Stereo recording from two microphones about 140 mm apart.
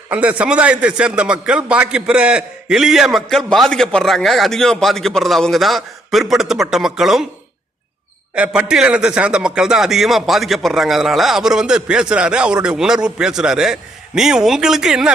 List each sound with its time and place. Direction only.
0.1 s a man's voice: 10° right (ahead or behind)
8.4 s a man's voice: 5° right (ahead or behind)